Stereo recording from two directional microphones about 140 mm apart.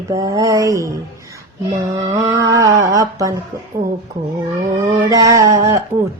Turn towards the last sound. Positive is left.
turn(degrees=-20)  # may be behind; listen again after turning